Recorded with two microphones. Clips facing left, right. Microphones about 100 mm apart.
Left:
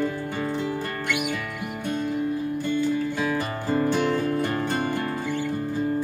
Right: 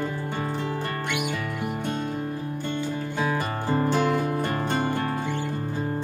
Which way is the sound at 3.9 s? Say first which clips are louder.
Even; 20° right (ahead or behind).